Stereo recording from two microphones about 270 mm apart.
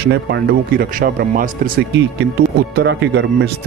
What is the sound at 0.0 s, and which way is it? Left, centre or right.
Speech, right.